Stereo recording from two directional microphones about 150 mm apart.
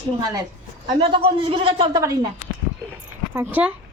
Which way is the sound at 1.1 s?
40° right (ahead or behind).